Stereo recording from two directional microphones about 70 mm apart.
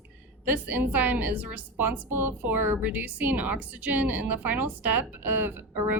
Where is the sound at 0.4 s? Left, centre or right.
Right.